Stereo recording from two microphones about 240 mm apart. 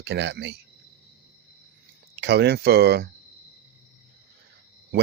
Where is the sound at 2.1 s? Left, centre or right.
Right.